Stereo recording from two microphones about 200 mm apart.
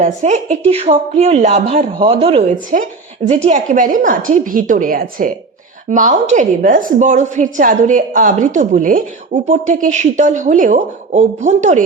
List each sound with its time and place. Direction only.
0.0 s a woman's voice: 35° right (ahead or behind)